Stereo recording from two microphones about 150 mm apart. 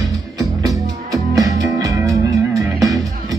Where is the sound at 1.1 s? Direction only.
25° right (ahead or behind).